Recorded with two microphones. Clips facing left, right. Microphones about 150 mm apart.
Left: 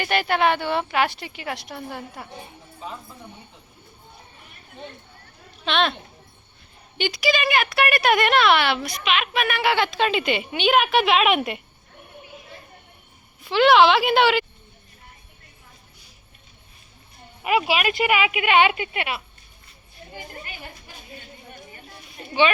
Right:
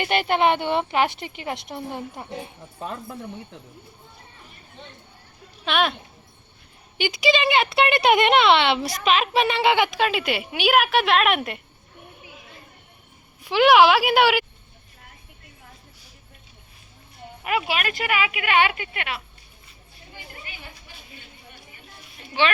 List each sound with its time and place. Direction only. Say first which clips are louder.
0.0 s speech: right 1 dB; 20° right (ahead or behind)
2.8 s speech: right 4 dB; 65° right (ahead or behind)
5.6 s a woman's voice: even; 10° right (ahead or behind)
7.0 s speech: right 2 dB; 20° right (ahead or behind)
10.0 s a woman's voice: left 1 dB; 5° right (ahead or behind)
13.4 s a woman's voice: even; 10° right (ahead or behind)
17.4 s speech: left 4 dB; 10° left (ahead or behind)
20.1 s speech: left 4 dB; 50° left (ahead or behind)